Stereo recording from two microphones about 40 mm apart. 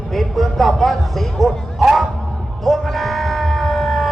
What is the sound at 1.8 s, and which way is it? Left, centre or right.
Crowd, centre.